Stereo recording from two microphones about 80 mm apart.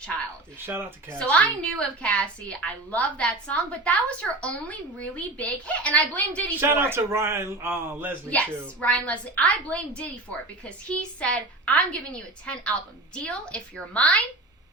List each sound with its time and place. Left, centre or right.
0.6 s speech: right
1.2 s a woman's voice: centre
6.6 s speech: right
8.3 s a woman's voice: centre